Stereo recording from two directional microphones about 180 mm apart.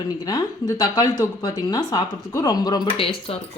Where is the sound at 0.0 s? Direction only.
20° left (ahead or behind).